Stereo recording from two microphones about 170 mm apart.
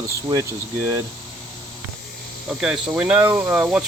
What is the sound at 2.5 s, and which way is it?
Speech, 5° right (ahead or behind).